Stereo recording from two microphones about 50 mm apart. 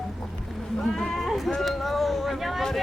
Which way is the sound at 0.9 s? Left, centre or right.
Centre.